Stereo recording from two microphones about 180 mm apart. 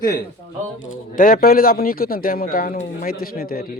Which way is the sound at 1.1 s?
50° left (ahead or behind).